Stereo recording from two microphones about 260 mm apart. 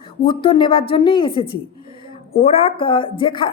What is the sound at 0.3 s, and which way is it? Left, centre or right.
A woman's voice, centre.